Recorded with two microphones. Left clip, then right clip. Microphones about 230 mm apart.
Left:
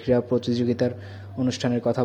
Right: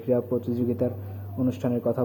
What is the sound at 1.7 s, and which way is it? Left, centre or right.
Speech, left.